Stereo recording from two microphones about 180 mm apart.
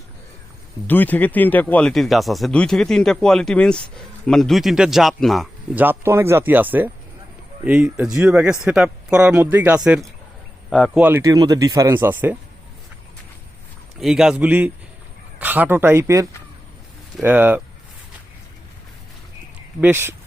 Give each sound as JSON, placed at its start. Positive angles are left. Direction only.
{"t": 0.9, "sound": "speech", "side_deg": 10}
{"t": 5.8, "sound": "speech", "side_deg": -10}
{"t": 11.0, "sound": "speech", "side_deg": -15}
{"t": 14.0, "sound": "speech", "side_deg": 0}
{"t": 19.8, "sound": "speech", "side_deg": -10}